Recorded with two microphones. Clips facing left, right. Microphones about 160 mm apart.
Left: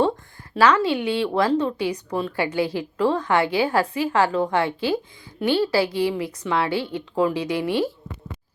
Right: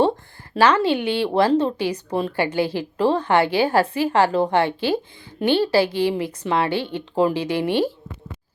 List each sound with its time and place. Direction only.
0.5 s a woman's voice: 30° right (ahead or behind)